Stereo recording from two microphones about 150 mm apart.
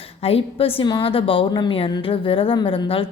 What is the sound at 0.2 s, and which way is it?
A woman's voice, 40° left (ahead or behind).